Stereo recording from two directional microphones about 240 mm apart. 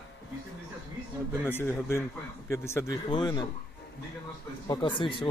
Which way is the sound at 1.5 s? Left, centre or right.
Centre.